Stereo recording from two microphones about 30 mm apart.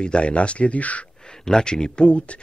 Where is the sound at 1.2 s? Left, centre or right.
Left.